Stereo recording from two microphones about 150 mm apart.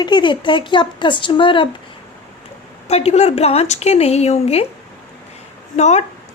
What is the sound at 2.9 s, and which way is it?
A woman's voice, 45° left (ahead or behind).